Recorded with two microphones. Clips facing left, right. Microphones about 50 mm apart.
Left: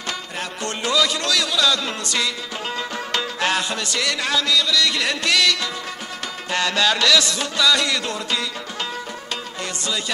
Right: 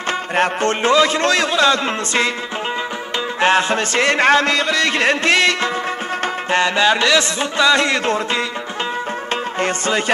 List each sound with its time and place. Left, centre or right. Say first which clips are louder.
0.4 s music: right 12 dB; right
3.3 s music: right 10 dB; right
9.6 s music: right 9 dB; right